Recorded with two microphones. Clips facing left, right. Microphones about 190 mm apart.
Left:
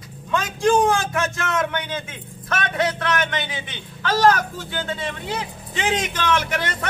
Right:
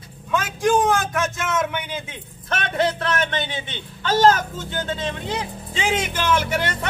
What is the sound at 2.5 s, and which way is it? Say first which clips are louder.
A man's voice: right 1 dB; 30° right (ahead or behind).